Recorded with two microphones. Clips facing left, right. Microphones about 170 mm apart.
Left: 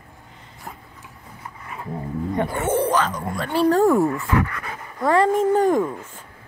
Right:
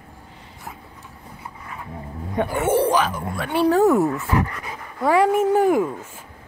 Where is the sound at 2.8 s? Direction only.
10° right (ahead or behind).